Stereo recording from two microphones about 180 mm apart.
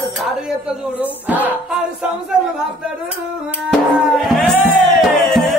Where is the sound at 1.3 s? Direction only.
10° right (ahead or behind).